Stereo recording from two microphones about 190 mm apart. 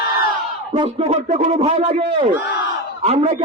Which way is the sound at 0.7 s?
35° right (ahead or behind).